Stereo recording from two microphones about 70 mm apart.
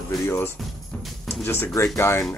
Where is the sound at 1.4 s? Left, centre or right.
Left.